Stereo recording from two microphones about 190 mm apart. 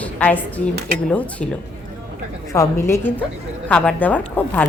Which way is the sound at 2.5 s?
15° left (ahead or behind).